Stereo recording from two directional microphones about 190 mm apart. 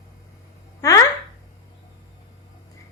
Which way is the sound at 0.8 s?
15° left (ahead or behind).